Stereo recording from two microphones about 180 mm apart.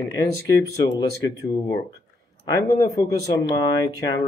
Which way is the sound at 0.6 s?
20° left (ahead or behind).